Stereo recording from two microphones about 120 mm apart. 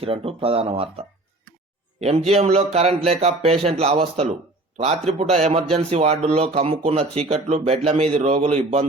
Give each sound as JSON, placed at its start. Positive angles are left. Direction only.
{"t": 0.0, "sound": "speech", "side_deg": -55}
{"t": 5.3, "sound": "speech", "side_deg": -60}